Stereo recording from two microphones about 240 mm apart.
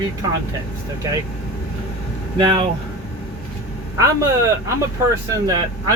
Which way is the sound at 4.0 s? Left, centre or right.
Centre.